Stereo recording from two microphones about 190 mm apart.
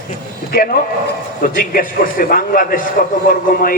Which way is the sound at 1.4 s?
50° left (ahead or behind).